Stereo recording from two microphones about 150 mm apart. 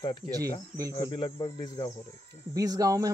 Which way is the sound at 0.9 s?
30° left (ahead or behind).